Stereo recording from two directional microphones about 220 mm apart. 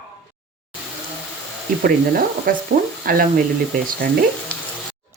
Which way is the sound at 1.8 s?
40° right (ahead or behind).